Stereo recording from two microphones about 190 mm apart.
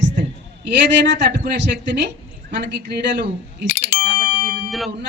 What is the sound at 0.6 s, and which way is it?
Speech, 65° right (ahead or behind).